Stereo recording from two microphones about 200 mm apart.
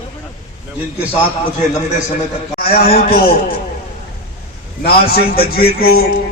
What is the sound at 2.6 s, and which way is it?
Speech, 50° left (ahead or behind).